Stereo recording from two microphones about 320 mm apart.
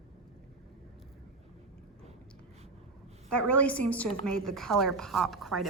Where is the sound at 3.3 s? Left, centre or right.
Centre.